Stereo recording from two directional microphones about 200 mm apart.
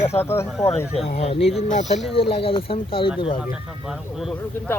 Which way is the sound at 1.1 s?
30° left (ahead or behind).